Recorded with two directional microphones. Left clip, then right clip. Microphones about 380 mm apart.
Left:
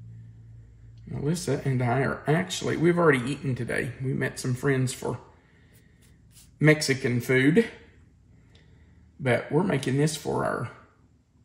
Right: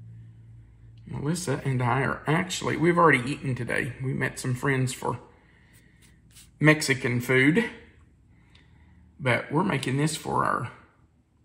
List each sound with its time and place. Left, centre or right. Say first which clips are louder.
1.0 s speech: left 1 dB; centre
6.6 s speech: right 1 dB; centre
9.2 s speech: even; centre